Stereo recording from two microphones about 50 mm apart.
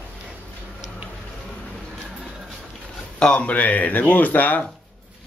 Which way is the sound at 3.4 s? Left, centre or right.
Left.